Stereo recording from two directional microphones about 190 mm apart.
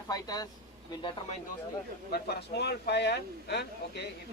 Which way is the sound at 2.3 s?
60° left (ahead or behind).